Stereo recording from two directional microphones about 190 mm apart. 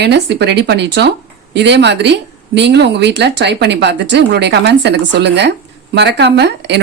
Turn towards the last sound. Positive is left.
turn(degrees=-65)  # may be behind; listen again after turning